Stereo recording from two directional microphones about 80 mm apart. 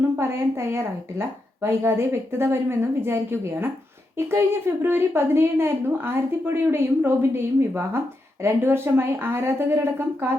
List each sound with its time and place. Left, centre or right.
0.2 s a woman's voice: right